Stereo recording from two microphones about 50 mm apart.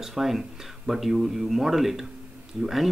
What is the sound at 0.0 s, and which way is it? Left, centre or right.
Speech, centre.